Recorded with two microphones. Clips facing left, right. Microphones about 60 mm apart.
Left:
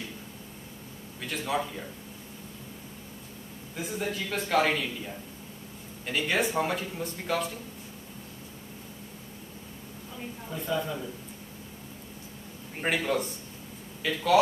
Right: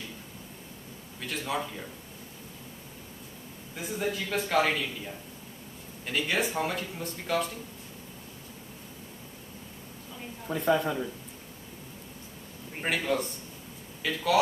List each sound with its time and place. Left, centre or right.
1.2 s speech: centre
3.7 s speech: centre
10.5 s speech: right
12.8 s speech: centre